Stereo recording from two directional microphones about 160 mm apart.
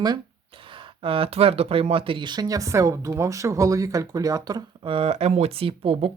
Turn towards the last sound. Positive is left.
turn(degrees=-35)  # may be behind; listen again after turning